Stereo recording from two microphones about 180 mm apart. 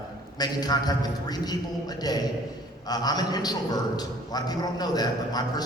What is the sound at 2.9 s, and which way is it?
A man's voice, 20° left (ahead or behind).